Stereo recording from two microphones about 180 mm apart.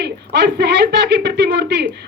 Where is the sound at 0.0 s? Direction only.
70° right (ahead or behind).